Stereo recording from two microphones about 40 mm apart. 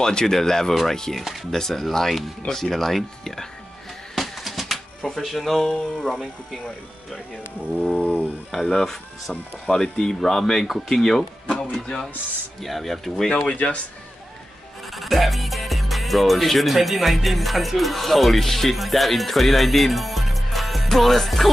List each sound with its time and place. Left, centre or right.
0.0 s speech: centre
1.2 s speech: centre
4.1 s a sound: centre
5.2 s speech: centre
7.9 s a sound: left
8.6 s speech: centre
12.6 s speech: centre
13.4 s speech: left
15.0 s speech: centre